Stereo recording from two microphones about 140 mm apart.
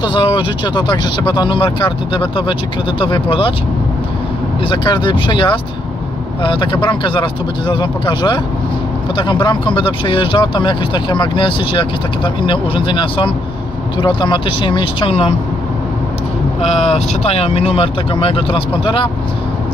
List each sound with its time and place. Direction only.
0.0 s speech: 35° left (ahead or behind)
4.6 s speech: 35° left (ahead or behind)
16.7 s speech: 50° left (ahead or behind)